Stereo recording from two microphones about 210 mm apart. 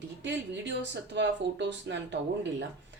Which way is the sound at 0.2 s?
55° right (ahead or behind).